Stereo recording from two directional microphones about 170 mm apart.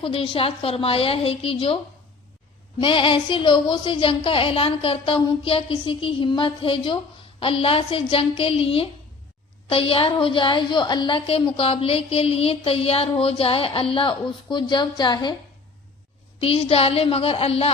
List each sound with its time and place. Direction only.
0.0 s a woman's voice: 30° left (ahead or behind)
2.8 s a woman's voice: 30° left (ahead or behind)
16.4 s a woman's voice: 35° left (ahead or behind)